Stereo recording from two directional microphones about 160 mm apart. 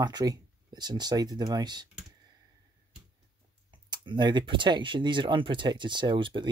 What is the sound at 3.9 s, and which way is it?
Speech, 30° right (ahead or behind).